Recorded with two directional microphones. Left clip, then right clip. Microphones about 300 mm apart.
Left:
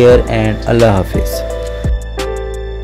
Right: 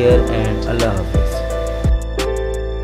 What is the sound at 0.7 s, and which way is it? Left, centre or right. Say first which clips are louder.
Speech: left 10 dB; left.